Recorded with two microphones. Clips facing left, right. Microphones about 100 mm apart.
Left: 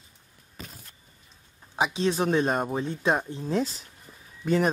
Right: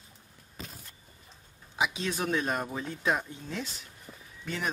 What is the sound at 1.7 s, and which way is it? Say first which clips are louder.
Speech: left 6 dB; 35° left (ahead or behind).